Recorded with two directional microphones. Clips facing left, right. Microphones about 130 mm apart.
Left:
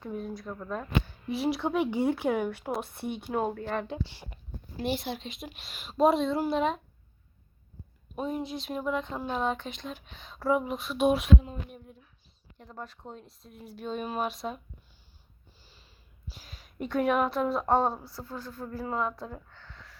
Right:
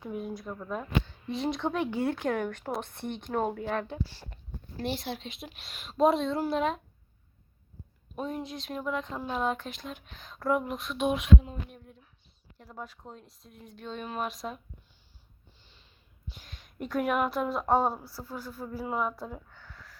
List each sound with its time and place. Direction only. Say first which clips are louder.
0.0 s a woman's voice: even; 5° right (ahead or behind)
1.0 s speech: left 2 dB; 5° left (ahead or behind)
3.8 s speech: even; 15° left (ahead or behind)
4.8 s a woman's voice: left 2 dB; centre (ahead or behind)
8.1 s a woman's voice: left 2 dB; 5° left (ahead or behind)
12.5 s a woman's voice: even; 5° right (ahead or behind)
15.6 s snort: left 4 dB; 5° left (ahead or behind)
16.3 s a woman's voice: even; 5° left (ahead or behind)